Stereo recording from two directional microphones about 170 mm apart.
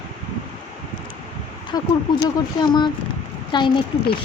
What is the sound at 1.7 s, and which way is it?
Speech, 25° left (ahead or behind).